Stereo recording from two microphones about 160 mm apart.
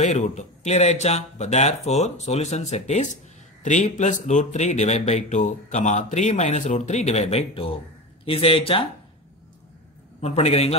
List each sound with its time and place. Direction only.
0.0 s speech: 45° left (ahead or behind)
10.2 s speech: 40° left (ahead or behind)